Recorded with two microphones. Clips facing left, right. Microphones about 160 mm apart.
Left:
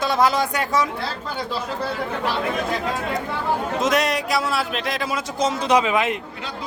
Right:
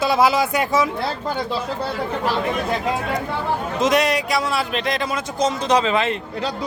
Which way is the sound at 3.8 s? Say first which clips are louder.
Right 5 dB; centre (ahead or behind).